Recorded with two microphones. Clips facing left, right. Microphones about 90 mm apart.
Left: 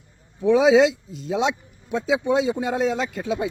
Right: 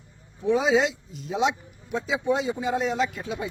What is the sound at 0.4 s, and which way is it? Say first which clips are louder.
Speech: left 6 dB; 90° left.